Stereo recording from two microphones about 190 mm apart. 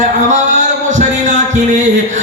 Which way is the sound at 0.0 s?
40° right (ahead or behind).